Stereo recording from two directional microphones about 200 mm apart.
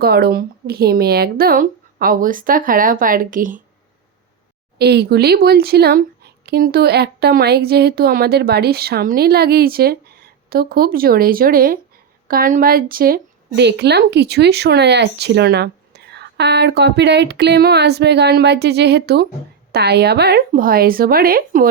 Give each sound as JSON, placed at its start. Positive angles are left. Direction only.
{"t": 0.0, "sound": "speech", "side_deg": -50}
{"t": 4.8, "sound": "a woman's voice", "side_deg": -55}